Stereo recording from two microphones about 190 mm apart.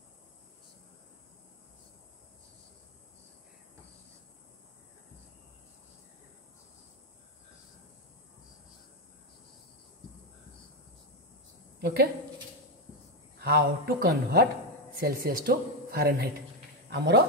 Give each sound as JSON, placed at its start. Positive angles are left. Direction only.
{"t": 11.8, "sound": "speech", "side_deg": -55}
{"t": 13.4, "sound": "speech", "side_deg": -55}